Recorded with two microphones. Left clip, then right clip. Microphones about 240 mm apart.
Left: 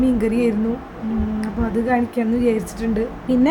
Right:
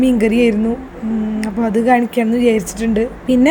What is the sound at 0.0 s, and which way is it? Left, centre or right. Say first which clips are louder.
A woman's voice: right 5 dB; centre.